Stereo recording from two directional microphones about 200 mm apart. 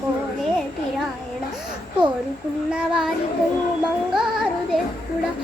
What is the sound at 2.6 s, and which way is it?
Child singing, 5° right (ahead or behind).